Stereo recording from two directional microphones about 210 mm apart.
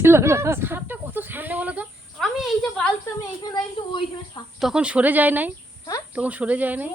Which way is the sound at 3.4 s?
20° left (ahead or behind).